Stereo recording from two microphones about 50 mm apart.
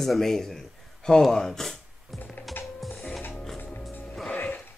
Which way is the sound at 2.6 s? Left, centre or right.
Left.